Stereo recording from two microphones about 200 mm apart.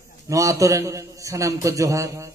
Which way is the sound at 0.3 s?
15° right (ahead or behind).